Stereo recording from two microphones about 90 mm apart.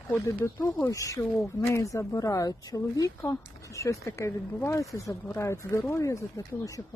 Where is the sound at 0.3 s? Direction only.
35° left (ahead or behind).